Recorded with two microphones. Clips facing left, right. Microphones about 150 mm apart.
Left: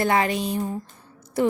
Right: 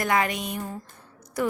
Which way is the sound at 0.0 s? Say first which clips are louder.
Left 3 dB; 30° left (ahead or behind).